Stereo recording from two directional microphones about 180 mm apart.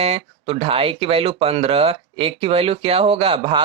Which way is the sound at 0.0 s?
35° right (ahead or behind).